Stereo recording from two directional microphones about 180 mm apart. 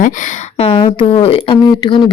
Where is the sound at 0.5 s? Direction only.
30° left (ahead or behind).